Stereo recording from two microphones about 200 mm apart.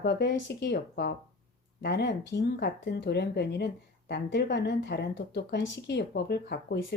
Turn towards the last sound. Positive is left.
turn(degrees=55)  # may be behind; listen again after turning